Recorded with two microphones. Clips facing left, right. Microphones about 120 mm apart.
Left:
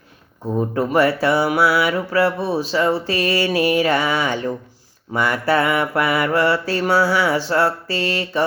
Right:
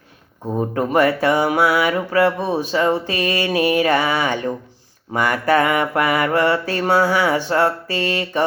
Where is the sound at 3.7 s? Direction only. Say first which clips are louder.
Right 1 dB; 45° right (ahead or behind).